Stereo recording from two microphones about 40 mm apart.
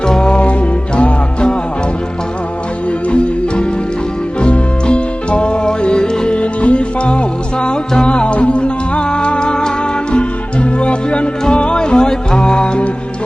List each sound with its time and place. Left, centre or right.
0.1 s music: left
3.1 s music: left